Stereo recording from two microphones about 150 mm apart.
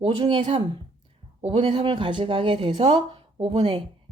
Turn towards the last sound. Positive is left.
turn(degrees=-30)  # may be behind; listen again after turning